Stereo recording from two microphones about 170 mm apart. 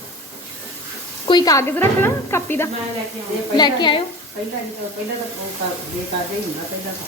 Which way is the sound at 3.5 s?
25° left (ahead or behind).